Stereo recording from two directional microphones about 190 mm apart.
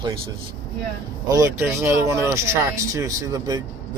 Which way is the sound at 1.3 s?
15° right (ahead or behind).